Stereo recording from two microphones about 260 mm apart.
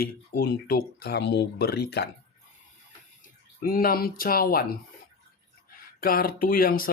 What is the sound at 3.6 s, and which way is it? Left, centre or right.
Speech, left.